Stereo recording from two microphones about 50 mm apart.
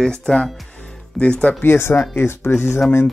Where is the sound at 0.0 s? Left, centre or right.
Centre.